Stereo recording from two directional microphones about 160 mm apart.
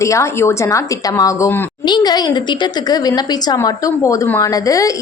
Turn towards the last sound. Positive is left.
turn(degrees=20)  # may be behind; listen again after turning